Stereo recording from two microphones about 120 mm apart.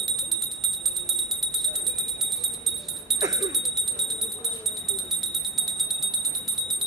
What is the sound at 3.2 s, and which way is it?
Jingle bell, 35° right (ahead or behind).